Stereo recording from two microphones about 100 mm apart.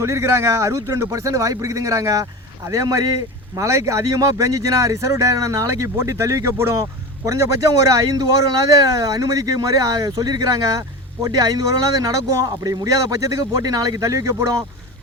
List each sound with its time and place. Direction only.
0.0 s speech: 30° right (ahead or behind)